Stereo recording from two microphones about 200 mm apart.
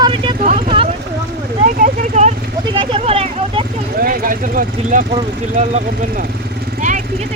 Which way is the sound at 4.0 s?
45° right (ahead or behind).